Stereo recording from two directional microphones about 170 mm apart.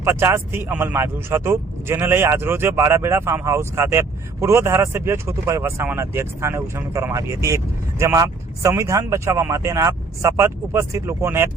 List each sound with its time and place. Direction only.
0.0 s speech: 15° right (ahead or behind)